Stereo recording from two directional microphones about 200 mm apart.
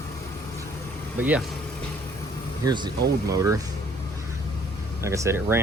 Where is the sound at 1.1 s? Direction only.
10° right (ahead or behind).